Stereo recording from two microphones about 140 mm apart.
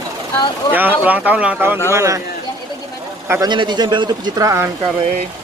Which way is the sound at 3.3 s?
25° right (ahead or behind).